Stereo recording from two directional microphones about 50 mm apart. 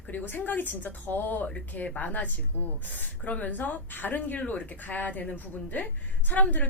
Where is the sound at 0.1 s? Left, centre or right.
Left.